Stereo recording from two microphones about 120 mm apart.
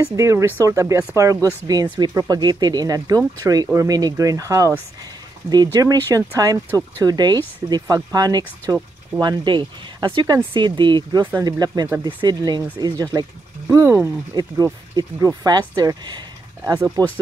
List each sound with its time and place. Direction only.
0.1 s speech: 25° right (ahead or behind)
13.7 s speech: 25° right (ahead or behind)